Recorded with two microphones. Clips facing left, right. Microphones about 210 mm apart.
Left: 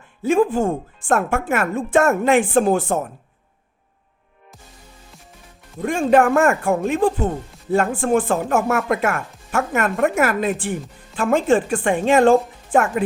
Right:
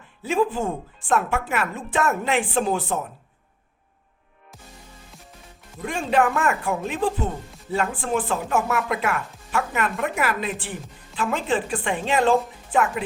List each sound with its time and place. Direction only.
0.2 s speech: 50° left (ahead or behind)
5.8 s speech: 50° left (ahead or behind)